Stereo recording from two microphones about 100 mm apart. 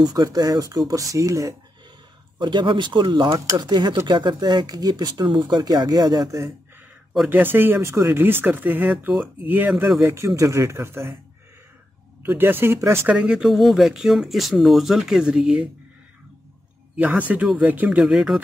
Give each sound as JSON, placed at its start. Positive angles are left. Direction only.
{"t": 0.0, "sound": "speech", "side_deg": -40}
{"t": 2.3, "sound": "speech", "side_deg": -50}
{"t": 7.2, "sound": "speech", "side_deg": -20}
{"t": 9.9, "sound": "speech", "side_deg": -30}
{"t": 12.2, "sound": "speech", "side_deg": -20}
{"t": 13.1, "sound": "speech", "side_deg": -10}
{"t": 16.9, "sound": "speech", "side_deg": -15}